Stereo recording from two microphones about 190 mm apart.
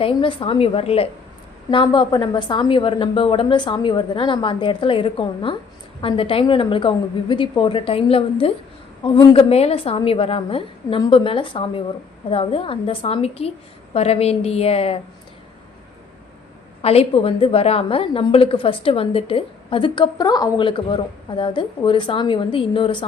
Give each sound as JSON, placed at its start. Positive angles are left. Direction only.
{"t": 0.0, "sound": "a woman's voice", "side_deg": 25}
{"t": 16.8, "sound": "a woman's voice", "side_deg": 30}